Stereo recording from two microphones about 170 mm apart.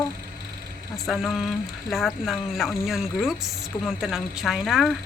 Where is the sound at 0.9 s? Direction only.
Centre (ahead or behind).